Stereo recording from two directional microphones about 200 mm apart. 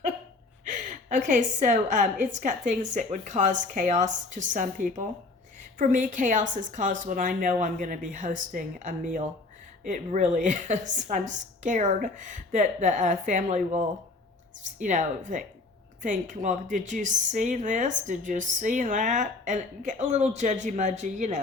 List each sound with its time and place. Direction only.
0.6 s speech: 40° right (ahead or behind)